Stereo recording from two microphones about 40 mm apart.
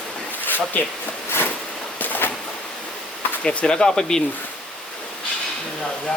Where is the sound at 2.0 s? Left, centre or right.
Left.